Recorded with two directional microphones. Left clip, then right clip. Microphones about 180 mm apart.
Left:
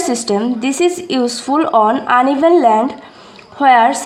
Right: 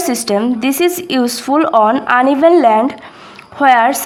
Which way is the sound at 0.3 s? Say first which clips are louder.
Right 2 dB; 20° right (ahead or behind).